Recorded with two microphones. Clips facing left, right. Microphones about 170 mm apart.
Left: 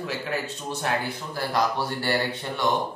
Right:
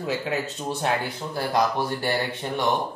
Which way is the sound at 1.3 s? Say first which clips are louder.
Right 2 dB; 20° right (ahead or behind).